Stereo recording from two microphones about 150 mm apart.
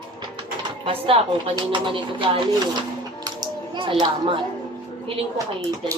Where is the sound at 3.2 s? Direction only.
30° right (ahead or behind).